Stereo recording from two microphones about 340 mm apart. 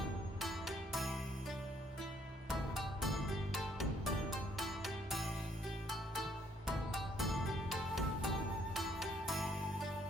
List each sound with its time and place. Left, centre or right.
0.3 s music: centre
6.7 s music: centre